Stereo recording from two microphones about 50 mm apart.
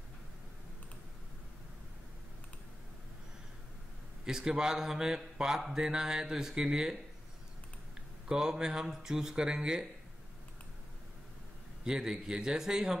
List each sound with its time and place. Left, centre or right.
4.2 s speech: centre
8.3 s speech: centre
11.8 s speech: centre